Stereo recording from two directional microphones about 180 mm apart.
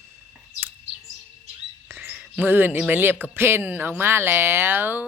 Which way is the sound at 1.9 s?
10° right (ahead or behind).